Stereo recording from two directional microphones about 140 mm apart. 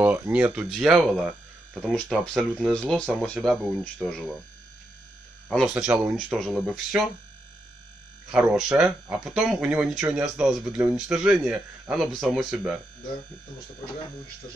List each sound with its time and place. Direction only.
0.0 s speech: 10° right (ahead or behind)
5.5 s speech: centre (ahead or behind)
8.3 s speech: 5° right (ahead or behind)